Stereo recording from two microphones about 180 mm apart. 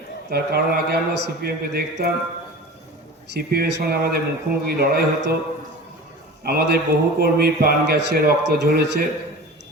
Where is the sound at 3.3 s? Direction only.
65° right (ahead or behind).